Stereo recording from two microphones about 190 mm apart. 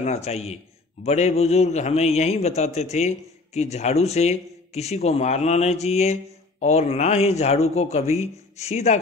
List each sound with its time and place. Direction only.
0.0 s a man's voice: 35° left (ahead or behind)